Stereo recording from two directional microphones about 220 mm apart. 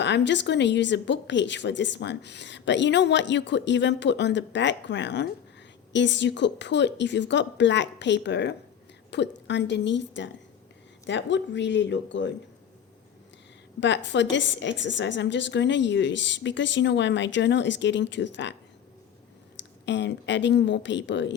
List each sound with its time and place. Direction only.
0.0 s a woman's voice: 55° left (ahead or behind)
13.7 s a woman's voice: 55° left (ahead or behind)
19.8 s a woman's voice: 55° left (ahead or behind)